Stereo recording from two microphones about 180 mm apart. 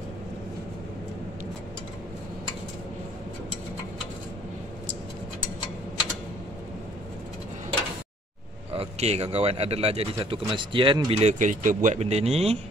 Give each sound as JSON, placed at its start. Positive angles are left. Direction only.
{"t": 8.7, "sound": "speech", "side_deg": -35}